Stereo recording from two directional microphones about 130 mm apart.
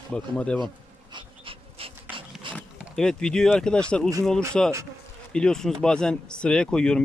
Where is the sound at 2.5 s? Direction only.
5° left (ahead or behind).